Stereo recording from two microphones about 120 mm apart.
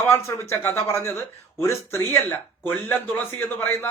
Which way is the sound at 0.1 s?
25° left (ahead or behind).